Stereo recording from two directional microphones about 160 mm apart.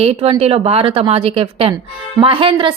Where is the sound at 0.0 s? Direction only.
40° right (ahead or behind).